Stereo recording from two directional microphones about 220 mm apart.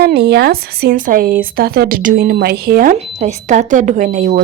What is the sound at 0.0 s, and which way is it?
Speech, 45° right (ahead or behind).